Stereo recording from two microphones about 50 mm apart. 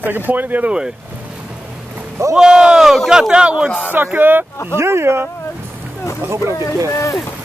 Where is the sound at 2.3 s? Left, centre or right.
Centre.